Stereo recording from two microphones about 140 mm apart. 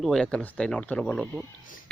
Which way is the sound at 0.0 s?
5° left (ahead or behind).